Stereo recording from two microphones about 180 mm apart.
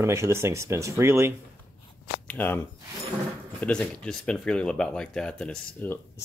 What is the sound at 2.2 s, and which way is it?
Speech, 10° left (ahead or behind).